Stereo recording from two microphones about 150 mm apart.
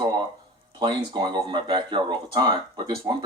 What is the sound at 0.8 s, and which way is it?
Speech, 30° right (ahead or behind).